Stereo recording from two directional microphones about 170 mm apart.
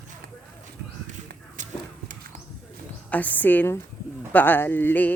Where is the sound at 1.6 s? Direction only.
50° right (ahead or behind).